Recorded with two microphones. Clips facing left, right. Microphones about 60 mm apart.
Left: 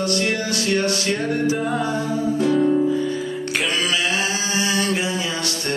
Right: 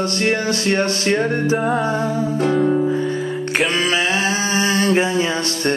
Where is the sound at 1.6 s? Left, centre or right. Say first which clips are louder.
Right 4 dB; centre.